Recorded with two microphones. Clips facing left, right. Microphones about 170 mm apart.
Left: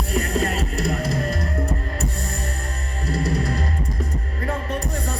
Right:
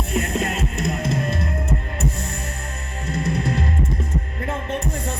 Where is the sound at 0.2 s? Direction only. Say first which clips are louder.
Left 1 dB; 35° left (ahead or behind).